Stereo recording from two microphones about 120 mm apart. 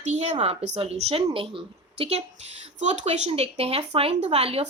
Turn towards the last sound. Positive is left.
turn(degrees=-55)  # may be behind; listen again after turning